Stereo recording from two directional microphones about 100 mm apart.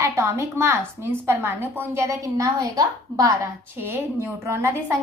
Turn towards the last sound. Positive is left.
turn(degrees=-30)  # may be behind; listen again after turning